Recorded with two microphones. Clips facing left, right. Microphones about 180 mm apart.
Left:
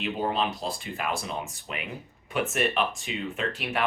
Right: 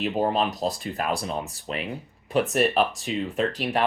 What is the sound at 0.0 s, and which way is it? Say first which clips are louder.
Speech: right 4 dB; 40° right (ahead or behind).